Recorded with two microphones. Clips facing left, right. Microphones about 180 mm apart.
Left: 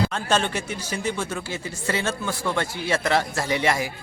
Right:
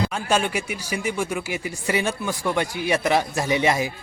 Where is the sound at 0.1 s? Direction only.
10° right (ahead or behind).